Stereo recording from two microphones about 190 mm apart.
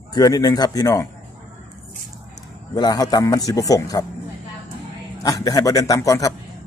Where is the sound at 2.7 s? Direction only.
20° left (ahead or behind).